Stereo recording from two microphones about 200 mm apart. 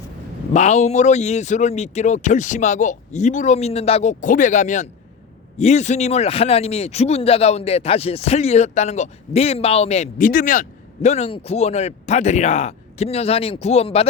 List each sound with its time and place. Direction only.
0.5 s speech: 35° left (ahead or behind)